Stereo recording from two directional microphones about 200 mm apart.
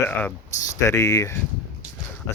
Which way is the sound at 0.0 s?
10° left (ahead or behind).